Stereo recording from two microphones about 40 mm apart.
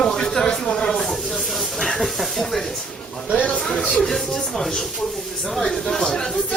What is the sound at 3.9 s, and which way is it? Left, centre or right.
Speech, centre.